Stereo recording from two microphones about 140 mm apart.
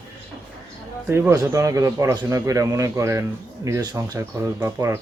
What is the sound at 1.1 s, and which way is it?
Speech, 15° right (ahead or behind).